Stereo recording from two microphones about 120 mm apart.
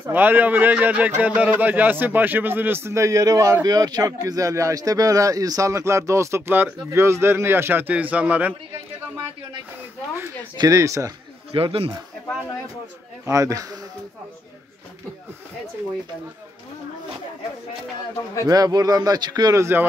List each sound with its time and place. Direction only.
0.1 s a man's voice: 15° right (ahead or behind)
10.6 s speech: 25° right (ahead or behind)
11.5 s speech: 50° right (ahead or behind)
13.2 s speech: 25° right (ahead or behind)
18.5 s speech: 30° right (ahead or behind)